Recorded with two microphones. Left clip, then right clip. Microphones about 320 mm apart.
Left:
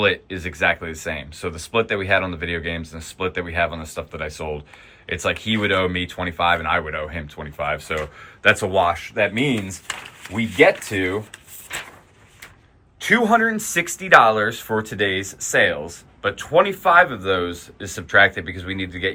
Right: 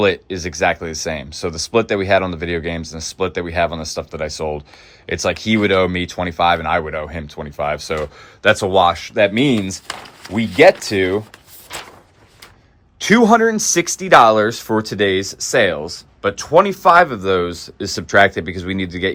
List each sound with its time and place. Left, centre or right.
0.0 s speech: centre
13.1 s speech: centre